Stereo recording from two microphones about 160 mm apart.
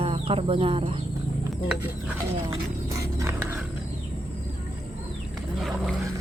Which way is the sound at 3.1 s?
15° right (ahead or behind).